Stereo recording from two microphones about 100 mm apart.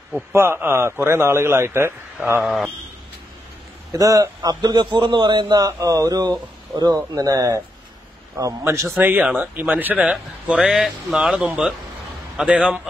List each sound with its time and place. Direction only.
0.3 s a man's voice: 25° right (ahead or behind)
2.4 s a man's voice: centre (ahead or behind)
3.9 s a man's voice: 35° right (ahead or behind)
6.7 s a man's voice: 5° left (ahead or behind)
7.2 s a man's voice: 35° right (ahead or behind); by 12.8 s 10° right (ahead or behind)